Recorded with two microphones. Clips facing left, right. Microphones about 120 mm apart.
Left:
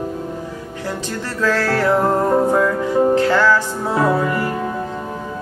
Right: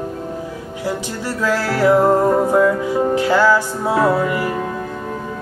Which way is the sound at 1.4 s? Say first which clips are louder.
Right 1 dB; 10° right (ahead or behind).